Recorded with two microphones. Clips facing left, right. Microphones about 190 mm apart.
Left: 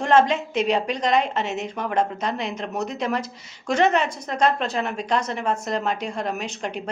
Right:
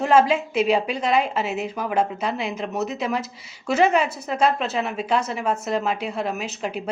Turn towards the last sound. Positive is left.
turn(degrees=-5)  # may be behind; listen again after turning